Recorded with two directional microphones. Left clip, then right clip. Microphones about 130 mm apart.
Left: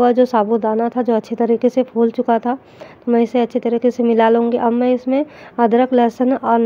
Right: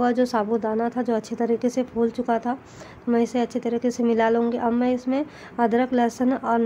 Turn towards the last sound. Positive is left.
turn(degrees=35)  # may be behind; listen again after turning